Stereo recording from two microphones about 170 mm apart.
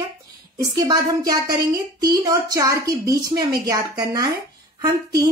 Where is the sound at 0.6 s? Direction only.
25° right (ahead or behind).